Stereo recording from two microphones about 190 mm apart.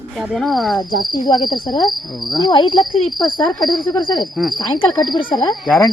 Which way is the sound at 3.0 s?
Centre (ahead or behind).